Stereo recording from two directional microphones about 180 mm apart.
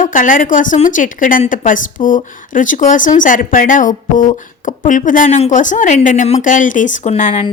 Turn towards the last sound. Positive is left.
turn(degrees=40)  # may be behind; listen again after turning